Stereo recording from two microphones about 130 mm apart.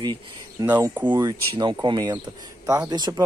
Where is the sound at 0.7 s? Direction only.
15° right (ahead or behind).